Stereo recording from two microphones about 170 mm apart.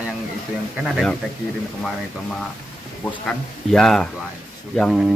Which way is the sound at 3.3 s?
5° left (ahead or behind).